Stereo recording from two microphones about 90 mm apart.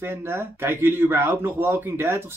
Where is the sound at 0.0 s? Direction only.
30° right (ahead or behind).